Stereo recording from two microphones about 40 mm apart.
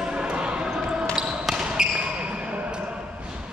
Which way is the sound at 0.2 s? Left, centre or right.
Right.